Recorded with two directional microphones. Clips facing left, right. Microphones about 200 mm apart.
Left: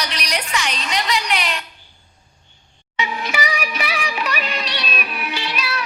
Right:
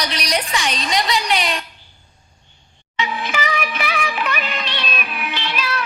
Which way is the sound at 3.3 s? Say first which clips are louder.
Right 1 dB; 10° left (ahead or behind).